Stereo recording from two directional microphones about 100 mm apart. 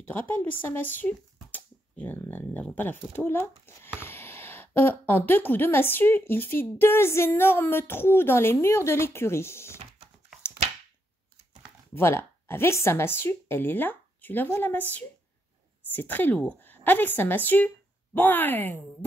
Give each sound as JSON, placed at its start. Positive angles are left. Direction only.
{"t": 0.0, "sound": "speech", "side_deg": 20}
{"t": 11.9, "sound": "a woman's voice", "side_deg": 25}